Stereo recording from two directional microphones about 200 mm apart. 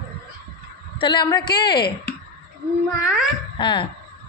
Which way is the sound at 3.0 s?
5° right (ahead or behind).